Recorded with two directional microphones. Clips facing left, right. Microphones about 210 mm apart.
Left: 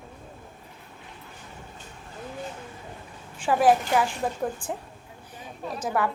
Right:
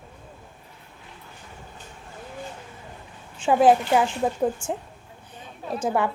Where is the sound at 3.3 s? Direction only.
25° right (ahead or behind).